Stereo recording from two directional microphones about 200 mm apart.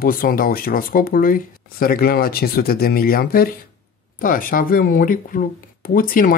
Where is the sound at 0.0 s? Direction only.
45° left (ahead or behind).